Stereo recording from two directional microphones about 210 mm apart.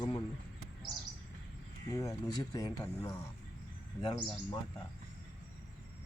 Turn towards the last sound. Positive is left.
turn(degrees=25)  # may be behind; listen again after turning